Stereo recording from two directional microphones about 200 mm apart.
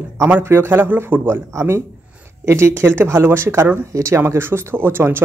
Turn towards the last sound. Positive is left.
turn(degrees=-10)  # may be behind; listen again after turning